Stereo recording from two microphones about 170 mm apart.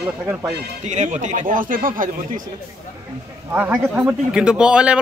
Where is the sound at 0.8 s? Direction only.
45° right (ahead or behind).